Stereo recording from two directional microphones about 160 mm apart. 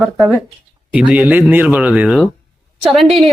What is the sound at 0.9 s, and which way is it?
Speech, 10° right (ahead or behind).